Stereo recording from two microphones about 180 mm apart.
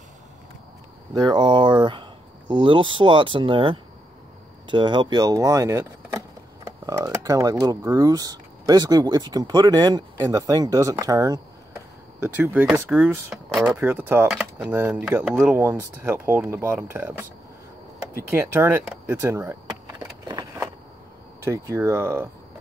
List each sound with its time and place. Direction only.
1.1 s speech: 20° right (ahead or behind)
12.2 s speech: 10° right (ahead or behind)
13.7 s speech: 10° right (ahead or behind)
18.3 s speech: 10° right (ahead or behind)
20.2 s a sound: 25° right (ahead or behind)
21.5 s speech: 15° right (ahead or behind)